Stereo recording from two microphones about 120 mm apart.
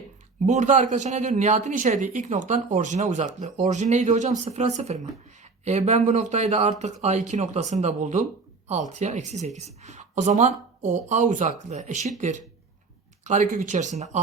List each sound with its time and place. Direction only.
0.4 s speech: 90° right; by 14.2 s 70° right (ahead or behind)